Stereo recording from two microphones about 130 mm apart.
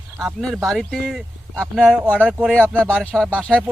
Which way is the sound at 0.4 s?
Centre (ahead or behind).